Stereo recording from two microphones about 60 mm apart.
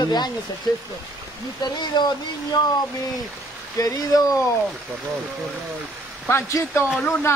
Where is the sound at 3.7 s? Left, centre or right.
Left.